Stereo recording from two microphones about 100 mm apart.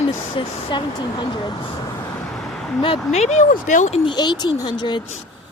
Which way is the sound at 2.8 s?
60° left (ahead or behind).